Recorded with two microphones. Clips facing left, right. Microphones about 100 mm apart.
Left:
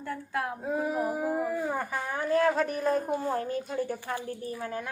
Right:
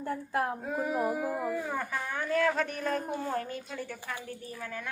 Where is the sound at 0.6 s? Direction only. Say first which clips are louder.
Left 1 dB; centre (ahead or behind).